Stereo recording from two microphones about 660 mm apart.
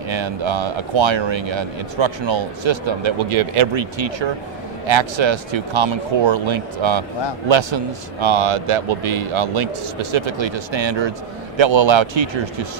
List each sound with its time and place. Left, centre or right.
0.1 s a man's voice: right